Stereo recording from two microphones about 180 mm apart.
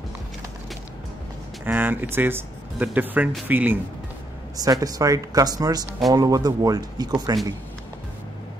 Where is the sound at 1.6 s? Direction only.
10° right (ahead or behind).